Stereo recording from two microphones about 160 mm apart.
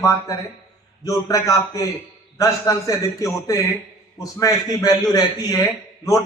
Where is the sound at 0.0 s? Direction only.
20° left (ahead or behind).